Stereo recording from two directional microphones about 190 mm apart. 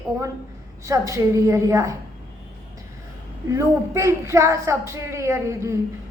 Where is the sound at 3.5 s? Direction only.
15° right (ahead or behind).